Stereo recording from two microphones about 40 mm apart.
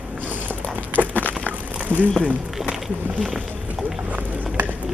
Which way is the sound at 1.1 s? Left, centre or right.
Left.